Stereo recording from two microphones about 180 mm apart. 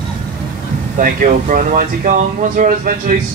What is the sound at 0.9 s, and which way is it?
Speech, 50° right (ahead or behind).